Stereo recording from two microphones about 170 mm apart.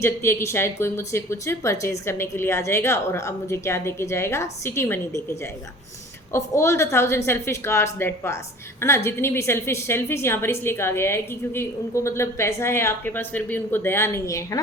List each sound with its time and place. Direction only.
0.0 s a woman's voice: 15° left (ahead or behind)